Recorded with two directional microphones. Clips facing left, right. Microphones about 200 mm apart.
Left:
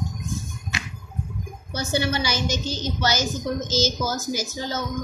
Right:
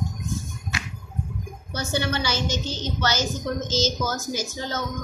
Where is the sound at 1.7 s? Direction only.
10° left (ahead or behind).